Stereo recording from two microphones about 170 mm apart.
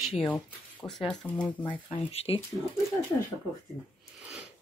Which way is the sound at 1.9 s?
35° left (ahead or behind).